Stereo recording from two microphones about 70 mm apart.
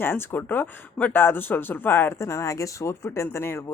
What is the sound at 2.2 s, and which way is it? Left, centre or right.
Speech, left.